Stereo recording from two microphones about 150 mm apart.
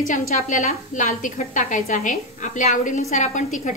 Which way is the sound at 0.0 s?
60° left (ahead or behind).